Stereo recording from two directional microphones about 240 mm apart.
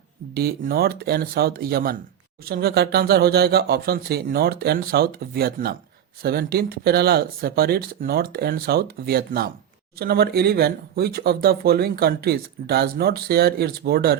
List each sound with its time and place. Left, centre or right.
0.3 s speech: right